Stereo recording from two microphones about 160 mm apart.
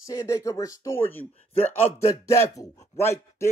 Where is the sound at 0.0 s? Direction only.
20° left (ahead or behind).